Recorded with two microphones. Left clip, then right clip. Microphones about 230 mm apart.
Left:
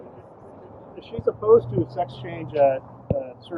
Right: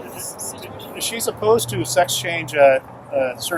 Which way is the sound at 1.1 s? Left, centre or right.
Right.